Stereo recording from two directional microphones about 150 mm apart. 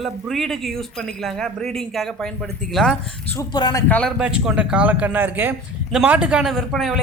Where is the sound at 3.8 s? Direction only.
10° left (ahead or behind).